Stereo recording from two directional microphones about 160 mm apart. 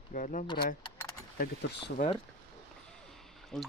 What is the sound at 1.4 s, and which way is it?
Speech, 90° left.